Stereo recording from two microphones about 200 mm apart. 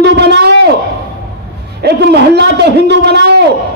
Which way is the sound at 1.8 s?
55° right (ahead or behind).